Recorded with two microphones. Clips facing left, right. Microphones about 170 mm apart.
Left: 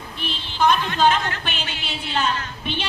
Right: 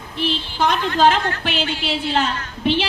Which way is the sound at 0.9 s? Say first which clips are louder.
Right 3 dB; 90° right.